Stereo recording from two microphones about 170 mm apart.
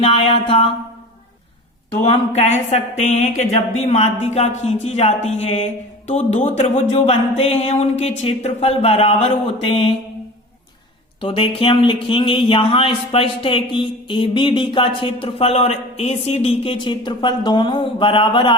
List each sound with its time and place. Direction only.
0.0 s speech: 35° left (ahead or behind)
2.0 s speech: 40° left (ahead or behind)
11.2 s speech: 30° left (ahead or behind)